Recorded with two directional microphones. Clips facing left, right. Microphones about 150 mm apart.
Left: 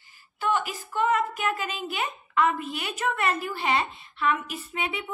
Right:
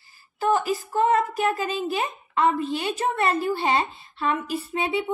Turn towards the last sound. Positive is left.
turn(degrees=-35)  # may be behind; listen again after turning